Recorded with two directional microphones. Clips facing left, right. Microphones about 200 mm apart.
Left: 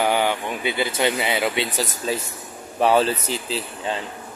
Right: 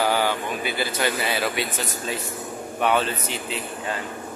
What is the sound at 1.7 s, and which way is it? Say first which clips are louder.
Speech: left 4 dB; 35° left (ahead or behind).